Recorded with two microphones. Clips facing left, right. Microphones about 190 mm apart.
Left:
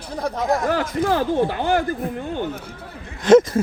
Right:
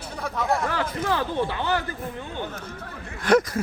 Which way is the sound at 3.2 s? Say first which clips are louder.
Left 7 dB; 25° left (ahead or behind).